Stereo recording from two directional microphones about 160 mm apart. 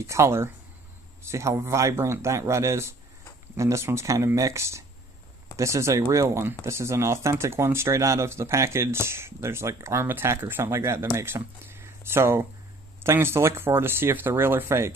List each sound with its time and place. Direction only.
0.0 s speech: 15° right (ahead or behind)